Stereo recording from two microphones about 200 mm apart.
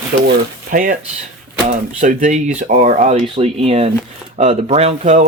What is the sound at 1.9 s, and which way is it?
Speech, 40° right (ahead or behind).